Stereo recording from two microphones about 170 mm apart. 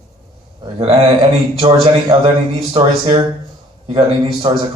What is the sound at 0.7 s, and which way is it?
Speech, 30° right (ahead or behind).